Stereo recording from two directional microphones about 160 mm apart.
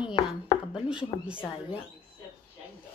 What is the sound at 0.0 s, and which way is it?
Chopping, 30° left (ahead or behind).